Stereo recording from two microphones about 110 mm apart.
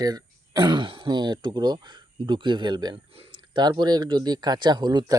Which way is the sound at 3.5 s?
40° right (ahead or behind).